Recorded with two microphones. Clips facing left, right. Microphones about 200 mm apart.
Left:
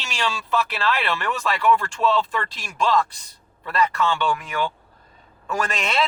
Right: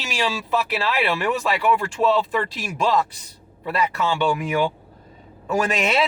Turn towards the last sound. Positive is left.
turn(degrees=-5)  # may be behind; listen again after turning